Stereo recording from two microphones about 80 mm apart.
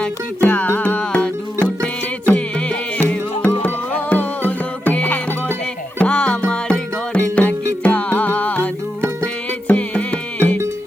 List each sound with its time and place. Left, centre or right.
0.0 s music: left